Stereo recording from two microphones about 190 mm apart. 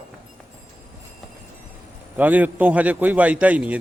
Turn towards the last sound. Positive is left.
turn(degrees=-5)  # may be behind; listen again after turning